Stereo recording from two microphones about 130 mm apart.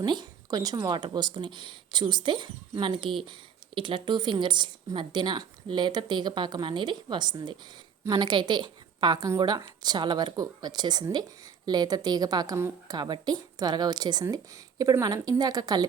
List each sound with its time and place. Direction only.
0.0 s speech: 35° right (ahead or behind)